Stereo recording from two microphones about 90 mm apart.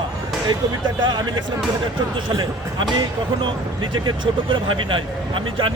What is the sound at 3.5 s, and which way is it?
Speech, 60° right (ahead or behind).